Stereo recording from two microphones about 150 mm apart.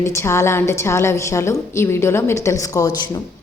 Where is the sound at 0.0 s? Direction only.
20° left (ahead or behind).